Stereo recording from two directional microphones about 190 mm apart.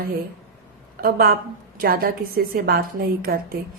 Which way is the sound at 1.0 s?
50° right (ahead or behind).